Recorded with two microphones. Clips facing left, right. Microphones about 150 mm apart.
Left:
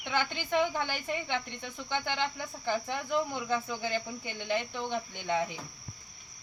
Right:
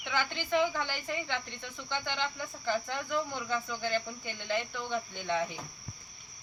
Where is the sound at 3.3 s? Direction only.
15° left (ahead or behind).